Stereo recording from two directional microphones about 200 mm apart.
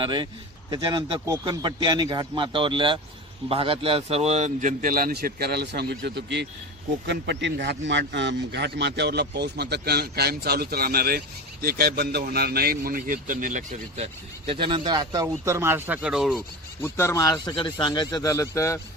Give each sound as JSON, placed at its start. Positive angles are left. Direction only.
{"t": 0.0, "sound": "a man's voice", "side_deg": -25}
{"t": 16.8, "sound": "speech", "side_deg": 15}